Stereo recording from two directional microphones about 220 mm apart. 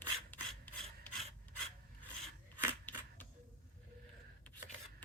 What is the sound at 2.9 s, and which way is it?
Single-lens reflex camera, 10° left (ahead or behind).